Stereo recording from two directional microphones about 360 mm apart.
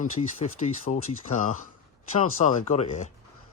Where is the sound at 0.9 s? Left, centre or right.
Left.